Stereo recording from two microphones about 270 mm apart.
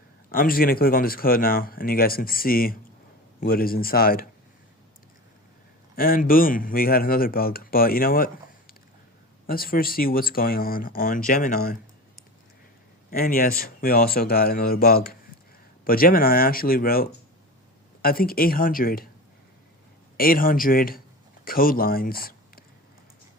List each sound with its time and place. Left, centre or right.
0.3 s speech: left
6.0 s speech: left
13.1 s speech: left
20.1 s speech: left